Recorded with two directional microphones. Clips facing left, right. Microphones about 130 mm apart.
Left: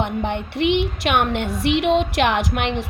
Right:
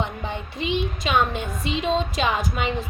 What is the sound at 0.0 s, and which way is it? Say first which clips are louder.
A woman's voice: left 6 dB; 65° left (ahead or behind).